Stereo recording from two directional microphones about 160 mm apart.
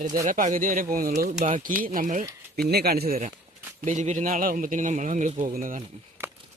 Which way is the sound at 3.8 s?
50° right (ahead or behind).